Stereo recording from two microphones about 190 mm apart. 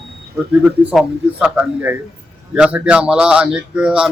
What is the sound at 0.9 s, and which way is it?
A man's voice, 5° right (ahead or behind).